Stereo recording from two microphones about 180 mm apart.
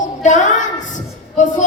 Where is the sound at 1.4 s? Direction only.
40° left (ahead or behind).